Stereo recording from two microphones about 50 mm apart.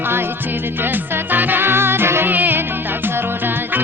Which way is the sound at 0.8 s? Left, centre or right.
Right.